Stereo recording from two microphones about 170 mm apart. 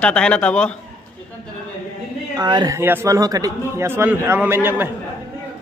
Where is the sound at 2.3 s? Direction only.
25° right (ahead or behind).